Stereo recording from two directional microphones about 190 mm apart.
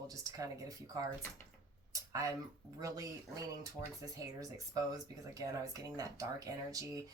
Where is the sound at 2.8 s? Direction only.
20° right (ahead or behind).